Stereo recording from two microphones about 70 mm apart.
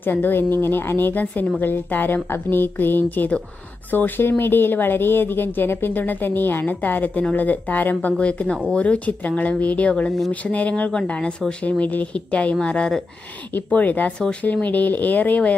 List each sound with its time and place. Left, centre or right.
0.0 s speech: left